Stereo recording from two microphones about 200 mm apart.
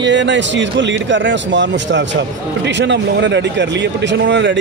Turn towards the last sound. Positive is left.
turn(degrees=-65)  # may be behind; listen again after turning